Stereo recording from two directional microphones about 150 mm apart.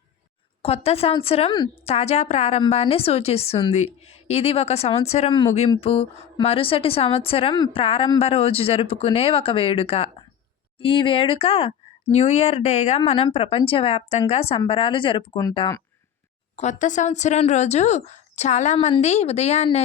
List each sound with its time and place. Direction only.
0.6 s a woman's voice: 45° left (ahead or behind)
5.3 s a woman's voice: 30° left (ahead or behind); by 13.0 s 45° left (ahead or behind)
13.0 s a woman's voice: 35° left (ahead or behind)
16.6 s speech: 55° left (ahead or behind)